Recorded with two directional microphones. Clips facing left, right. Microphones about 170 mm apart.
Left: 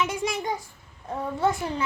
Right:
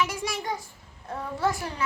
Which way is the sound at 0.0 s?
20° left (ahead or behind).